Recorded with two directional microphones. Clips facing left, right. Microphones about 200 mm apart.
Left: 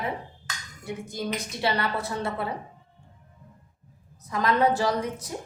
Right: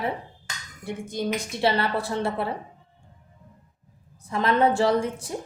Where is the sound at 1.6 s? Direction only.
30° right (ahead or behind).